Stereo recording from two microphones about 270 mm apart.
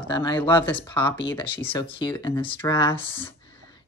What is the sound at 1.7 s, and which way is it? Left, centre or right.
Speech, centre.